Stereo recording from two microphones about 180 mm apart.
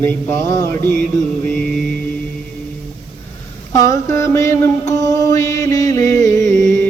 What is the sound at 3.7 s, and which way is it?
Mantra, 15° left (ahead or behind).